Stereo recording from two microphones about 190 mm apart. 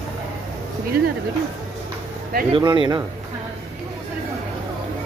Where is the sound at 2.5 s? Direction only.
25° right (ahead or behind).